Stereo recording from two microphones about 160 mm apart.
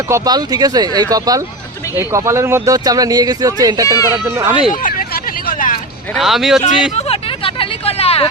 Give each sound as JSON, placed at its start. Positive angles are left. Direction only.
{"t": 0.1, "sound": "speech", "side_deg": -25}
{"t": 4.3, "sound": "speech", "side_deg": -15}
{"t": 4.7, "sound": "hubbub", "side_deg": 55}
{"t": 6.1, "sound": "speech", "side_deg": 0}
{"t": 6.9, "sound": "vehicle", "side_deg": 35}